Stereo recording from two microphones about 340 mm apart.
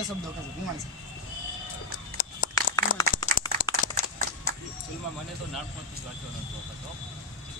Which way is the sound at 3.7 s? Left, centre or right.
Left.